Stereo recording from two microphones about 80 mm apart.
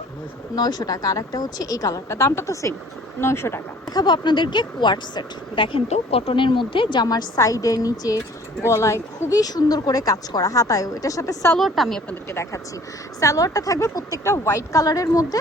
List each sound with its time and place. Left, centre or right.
0.5 s speech: left
3.9 s a woman's voice: left
8.6 s speech: left
11.5 s speech: centre
13.1 s speech: left